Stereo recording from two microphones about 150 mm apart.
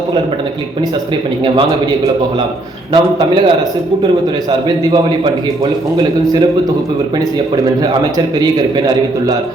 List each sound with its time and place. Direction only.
2.9 s a man's voice: 30° right (ahead or behind)
4.8 s a man's voice: 30° right (ahead or behind)